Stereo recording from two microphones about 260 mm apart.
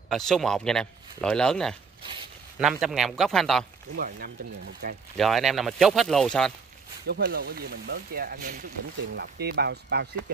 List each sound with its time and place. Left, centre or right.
0.1 s speech: centre
3.9 s speech: right
5.1 s speech: centre
7.1 s speech: right